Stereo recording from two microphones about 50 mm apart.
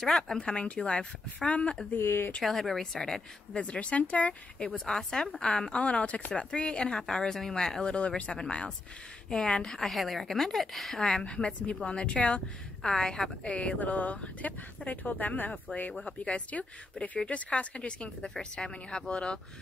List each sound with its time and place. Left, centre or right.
0.0 s a woman's voice: centre
0.4 s speech: left
2.0 s speech: left
2.4 s a woman's voice: centre
3.5 s speech: left
4.8 s a woman's voice: centre
11.0 s speech: centre